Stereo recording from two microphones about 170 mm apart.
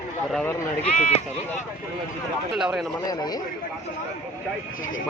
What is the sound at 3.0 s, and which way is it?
Speech, 25° left (ahead or behind).